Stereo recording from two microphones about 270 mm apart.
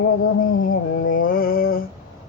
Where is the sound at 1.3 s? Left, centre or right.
Left.